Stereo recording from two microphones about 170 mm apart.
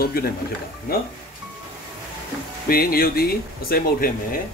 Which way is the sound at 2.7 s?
60° left (ahead or behind).